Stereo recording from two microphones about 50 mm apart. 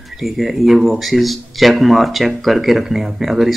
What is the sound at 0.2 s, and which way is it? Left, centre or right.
Speech, centre.